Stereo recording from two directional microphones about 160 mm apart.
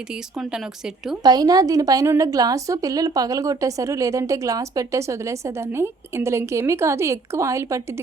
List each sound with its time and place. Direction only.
1.2 s a woman's voice: 25° right (ahead or behind)